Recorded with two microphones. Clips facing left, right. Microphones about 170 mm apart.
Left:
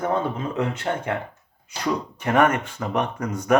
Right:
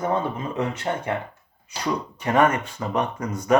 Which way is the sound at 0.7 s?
55° left (ahead or behind).